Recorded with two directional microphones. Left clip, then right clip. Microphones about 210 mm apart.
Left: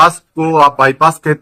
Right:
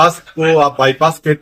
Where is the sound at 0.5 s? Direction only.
25° left (ahead or behind).